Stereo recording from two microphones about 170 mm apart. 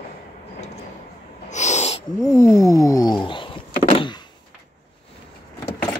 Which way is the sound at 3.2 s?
30° left (ahead or behind).